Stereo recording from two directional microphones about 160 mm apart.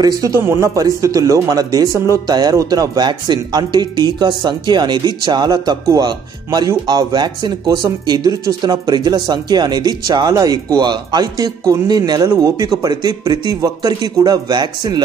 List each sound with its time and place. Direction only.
0.0 s speech: 20° right (ahead or behind)